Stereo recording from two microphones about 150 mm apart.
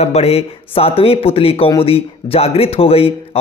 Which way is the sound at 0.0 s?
45° left (ahead or behind).